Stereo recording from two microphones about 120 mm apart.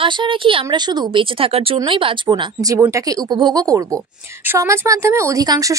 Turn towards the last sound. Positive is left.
turn(degrees=-30)  # may be behind; listen again after turning